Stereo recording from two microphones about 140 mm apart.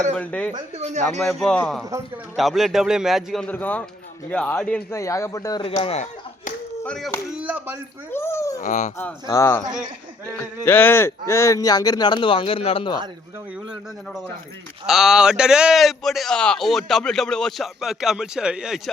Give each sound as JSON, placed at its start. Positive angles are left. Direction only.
{"t": 0.2, "sound": "speech", "side_deg": 10}
{"t": 0.8, "sound": "speech", "side_deg": -50}
{"t": 1.2, "sound": "a man's voice", "side_deg": 0}
{"t": 3.5, "sound": "speech", "side_deg": 10}
{"t": 4.9, "sound": "speech", "side_deg": 20}
{"t": 5.6, "sound": "speech", "side_deg": 40}
{"t": 6.8, "sound": "a man's voice", "side_deg": 5}
{"t": 7.3, "sound": "speech", "side_deg": -10}
{"t": 8.1, "sound": "speech", "side_deg": 20}
{"t": 8.6, "sound": "speech", "side_deg": 60}
{"t": 9.2, "sound": "speech", "side_deg": 20}
{"t": 13.7, "sound": "a man's voice", "side_deg": 0}